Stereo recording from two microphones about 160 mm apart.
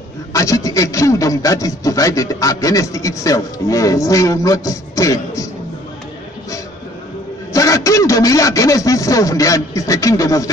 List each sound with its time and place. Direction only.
0.3 s a man's voice: 20° left (ahead or behind)
7.5 s speech: 20° left (ahead or behind)